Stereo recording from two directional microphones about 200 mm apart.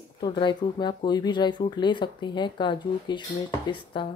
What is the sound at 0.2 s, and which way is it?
Speech, 25° left (ahead or behind).